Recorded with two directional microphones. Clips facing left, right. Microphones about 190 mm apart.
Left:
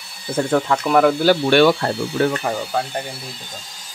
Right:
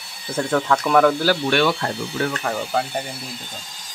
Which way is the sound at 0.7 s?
10° left (ahead or behind).